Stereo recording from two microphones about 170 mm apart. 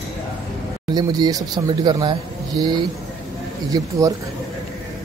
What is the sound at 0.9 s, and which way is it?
Speech, 25° right (ahead or behind).